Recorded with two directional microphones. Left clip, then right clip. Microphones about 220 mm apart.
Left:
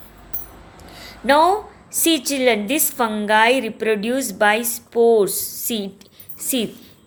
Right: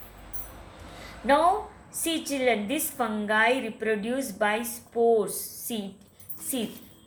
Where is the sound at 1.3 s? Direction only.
45° left (ahead or behind).